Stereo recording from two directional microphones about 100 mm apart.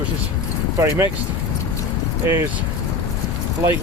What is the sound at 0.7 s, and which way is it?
Speech, 25° right (ahead or behind).